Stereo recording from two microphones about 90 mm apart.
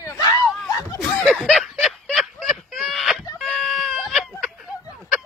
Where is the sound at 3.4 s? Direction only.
5° left (ahead or behind).